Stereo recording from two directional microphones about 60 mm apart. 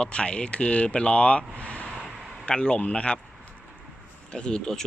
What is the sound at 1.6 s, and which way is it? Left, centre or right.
Vehicle, left.